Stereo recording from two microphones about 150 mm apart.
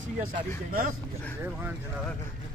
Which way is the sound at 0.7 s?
70° right (ahead or behind).